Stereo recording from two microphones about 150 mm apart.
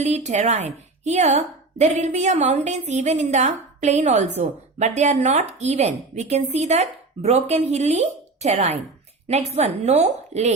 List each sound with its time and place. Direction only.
0.0 s a woman's voice: 50° right (ahead or behind)